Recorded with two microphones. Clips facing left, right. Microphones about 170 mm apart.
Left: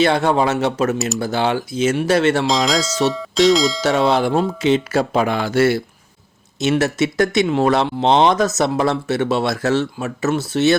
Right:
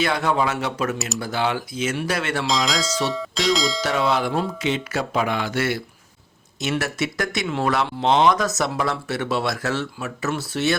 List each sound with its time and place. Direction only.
0.0 s speech: 30° left (ahead or behind)
2.5 s speech: centre (ahead or behind)
3.8 s speech: 25° left (ahead or behind)